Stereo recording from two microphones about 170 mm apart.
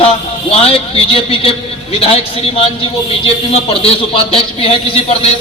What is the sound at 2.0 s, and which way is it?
A man's voice, 35° left (ahead or behind).